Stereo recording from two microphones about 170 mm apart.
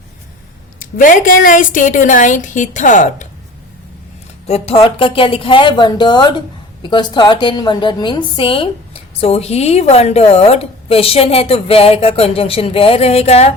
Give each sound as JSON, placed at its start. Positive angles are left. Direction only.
{"t": 0.8, "sound": "a woman's voice", "side_deg": 50}
{"t": 4.4, "sound": "a woman's voice", "side_deg": 35}